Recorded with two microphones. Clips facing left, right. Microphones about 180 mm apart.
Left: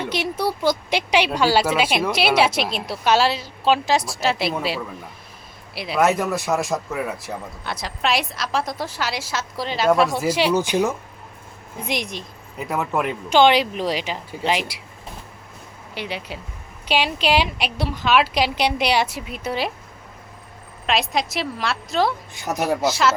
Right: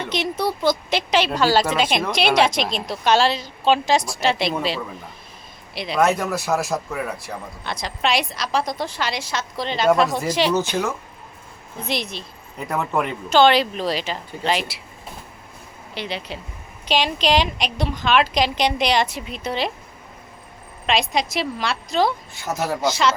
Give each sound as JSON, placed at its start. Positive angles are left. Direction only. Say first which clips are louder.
{"t": 0.0, "sound": "a woman's voice", "louder": "even", "side_deg": 10}
{"t": 12.6, "sound": "a woman's voice", "louder": "even", "side_deg": 0}
{"t": 13.3, "sound": "a woman's voice", "louder": "even", "side_deg": 15}
{"t": 16.0, "sound": "a woman's voice", "louder": "right 1 dB", "side_deg": 10}
{"t": 21.1, "sound": "a woman's voice", "louder": "right 1 dB", "side_deg": 0}
{"t": 22.4, "sound": "a woman's voice", "louder": "left 2 dB", "side_deg": 15}
{"t": 22.8, "sound": "a woman's voice", "louder": "right 2 dB", "side_deg": 5}